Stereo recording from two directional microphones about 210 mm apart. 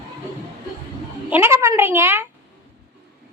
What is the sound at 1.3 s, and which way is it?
Speech, 10° right (ahead or behind).